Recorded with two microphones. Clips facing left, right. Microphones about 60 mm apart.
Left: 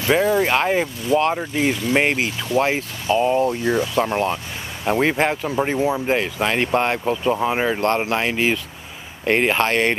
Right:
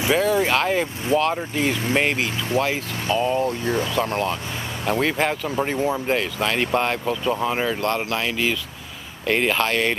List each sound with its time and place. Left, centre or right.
0.1 s speech: centre
1.1 s speech: right
1.5 s speech: left; by 6.1 s centre
6.1 s speech: left